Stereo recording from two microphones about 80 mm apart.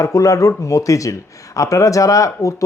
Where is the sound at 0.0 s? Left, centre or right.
Left.